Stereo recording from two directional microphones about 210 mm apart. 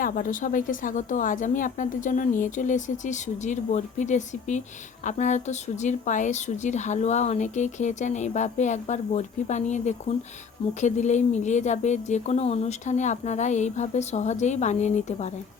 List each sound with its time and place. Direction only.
0.0 s speech: 40° left (ahead or behind)